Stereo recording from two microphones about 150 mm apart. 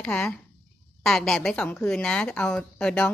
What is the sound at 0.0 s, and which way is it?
A woman's voice, 10° left (ahead or behind).